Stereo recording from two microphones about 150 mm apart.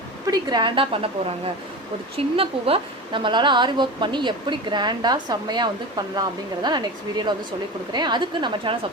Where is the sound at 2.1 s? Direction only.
40° right (ahead or behind).